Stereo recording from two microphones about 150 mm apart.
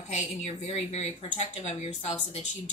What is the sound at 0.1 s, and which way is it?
Speech, 50° left (ahead or behind).